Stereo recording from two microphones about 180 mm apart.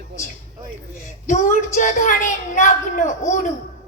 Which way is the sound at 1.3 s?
45° left (ahead or behind).